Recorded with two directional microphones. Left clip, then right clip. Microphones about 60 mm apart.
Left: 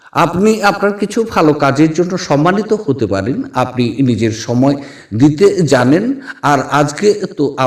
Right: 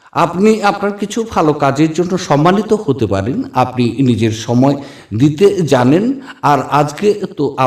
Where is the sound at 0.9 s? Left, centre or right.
Left.